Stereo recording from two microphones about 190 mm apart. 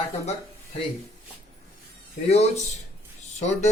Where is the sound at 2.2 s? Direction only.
35° left (ahead or behind).